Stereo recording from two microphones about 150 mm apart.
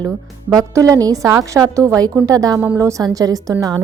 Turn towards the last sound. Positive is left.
turn(degrees=-25)  # may be behind; listen again after turning